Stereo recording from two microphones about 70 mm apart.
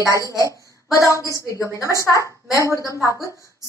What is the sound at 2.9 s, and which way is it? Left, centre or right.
Speech, right.